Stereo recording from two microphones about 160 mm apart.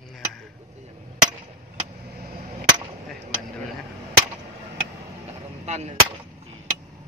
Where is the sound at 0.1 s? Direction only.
5° left (ahead or behind).